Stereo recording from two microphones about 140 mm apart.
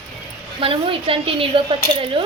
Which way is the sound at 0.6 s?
40° right (ahead or behind).